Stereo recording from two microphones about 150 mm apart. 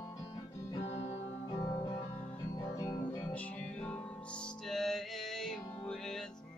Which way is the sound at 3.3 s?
10° left (ahead or behind).